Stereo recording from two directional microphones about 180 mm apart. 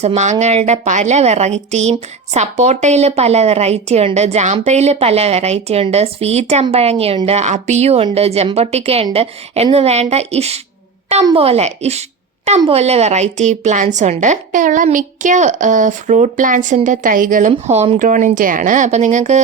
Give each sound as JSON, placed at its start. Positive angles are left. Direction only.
{"t": 0.0, "sound": "a woman's voice", "side_deg": -40}
{"t": 17.5, "sound": "a woman's voice", "side_deg": -35}